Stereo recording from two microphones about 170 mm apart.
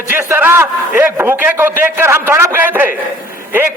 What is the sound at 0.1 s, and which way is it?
A man's voice, 10° right (ahead or behind).